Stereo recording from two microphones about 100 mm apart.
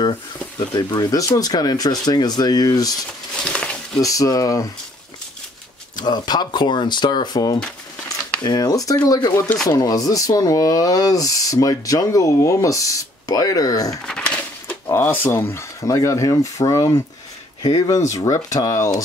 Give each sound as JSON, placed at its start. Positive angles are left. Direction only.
{"t": 0.6, "sound": "speech", "side_deg": 45}
{"t": 3.4, "sound": "a sound", "side_deg": 10}
{"t": 4.0, "sound": "speech", "side_deg": 35}
{"t": 5.9, "sound": "speech", "side_deg": 45}
{"t": 14.0, "sound": "a sound", "side_deg": 10}
{"t": 14.9, "sound": "speech", "side_deg": 20}